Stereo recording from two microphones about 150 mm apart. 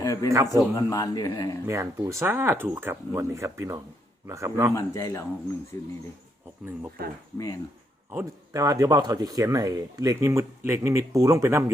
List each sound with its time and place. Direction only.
0.0 s a sound: 20° left (ahead or behind)
0.4 s a man's voice: 25° left (ahead or behind)
1.6 s speech: 20° right (ahead or behind)
4.7 s a man's voice: 20° left (ahead or behind)
8.1 s speech: 20° right (ahead or behind)